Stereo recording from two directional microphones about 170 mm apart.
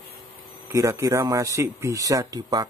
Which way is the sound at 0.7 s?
20° right (ahead or behind).